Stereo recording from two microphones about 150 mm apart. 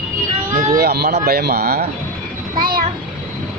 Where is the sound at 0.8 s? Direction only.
90° right.